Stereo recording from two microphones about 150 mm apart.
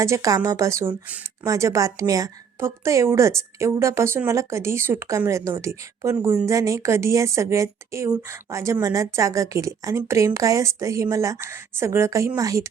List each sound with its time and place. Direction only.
0.0 s a woman's voice: 20° right (ahead or behind)